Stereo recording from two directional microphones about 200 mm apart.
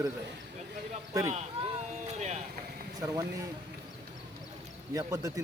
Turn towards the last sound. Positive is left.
turn(degrees=-15)  # may be behind; listen again after turning